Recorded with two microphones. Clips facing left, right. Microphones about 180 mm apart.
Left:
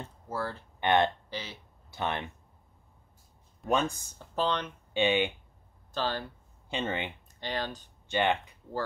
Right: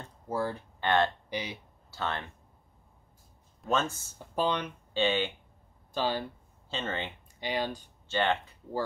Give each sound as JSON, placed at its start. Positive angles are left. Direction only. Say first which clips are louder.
{"t": 0.3, "sound": "speech", "louder": "right 4 dB", "side_deg": -15}
{"t": 0.7, "sound": "speech", "louder": "left 2 dB", "side_deg": 20}
{"t": 1.3, "sound": "speech", "louder": "right 4 dB", "side_deg": -15}
{"t": 1.9, "sound": "speech", "louder": "left 2 dB", "side_deg": 20}
{"t": 3.6, "sound": "speech", "louder": "left 1 dB", "side_deg": 15}
{"t": 4.4, "sound": "speech", "louder": "right 1 dB", "side_deg": -10}
{"t": 4.9, "sound": "speech", "louder": "left 2 dB", "side_deg": 15}
{"t": 5.9, "sound": "speech", "louder": "right 2 dB", "side_deg": -10}
{"t": 6.7, "sound": "speech", "louder": "left 2 dB", "side_deg": 15}
{"t": 7.3, "sound": "speech", "louder": "right 3 dB", "side_deg": -10}
{"t": 8.1, "sound": "speech", "louder": "left 1 dB", "side_deg": 15}